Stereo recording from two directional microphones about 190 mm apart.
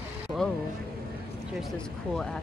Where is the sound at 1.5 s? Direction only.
5° left (ahead or behind).